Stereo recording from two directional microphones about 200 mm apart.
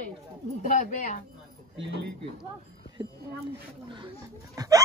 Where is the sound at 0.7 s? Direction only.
40° left (ahead or behind).